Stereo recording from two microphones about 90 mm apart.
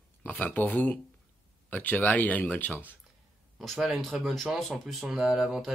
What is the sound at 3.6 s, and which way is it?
Speech, 5° left (ahead or behind).